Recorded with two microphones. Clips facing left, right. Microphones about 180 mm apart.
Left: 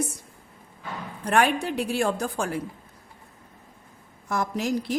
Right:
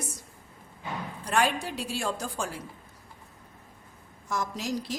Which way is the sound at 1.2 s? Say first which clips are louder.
Left 5 dB; 60° left (ahead or behind).